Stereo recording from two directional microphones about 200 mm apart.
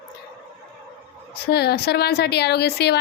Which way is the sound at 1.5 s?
55° left (ahead or behind).